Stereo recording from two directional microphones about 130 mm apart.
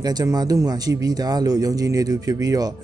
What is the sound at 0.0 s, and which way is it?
Speech, 30° right (ahead or behind).